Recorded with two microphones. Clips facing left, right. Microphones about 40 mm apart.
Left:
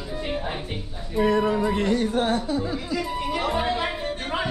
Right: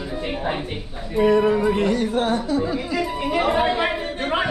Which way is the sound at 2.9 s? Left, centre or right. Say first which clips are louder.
Right 4 dB; right.